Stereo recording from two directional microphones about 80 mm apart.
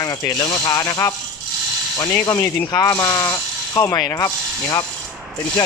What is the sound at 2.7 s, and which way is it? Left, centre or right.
Speech, left.